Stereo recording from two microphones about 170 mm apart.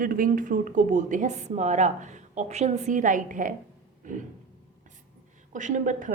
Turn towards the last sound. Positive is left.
turn(degrees=-50)  # may be behind; listen again after turning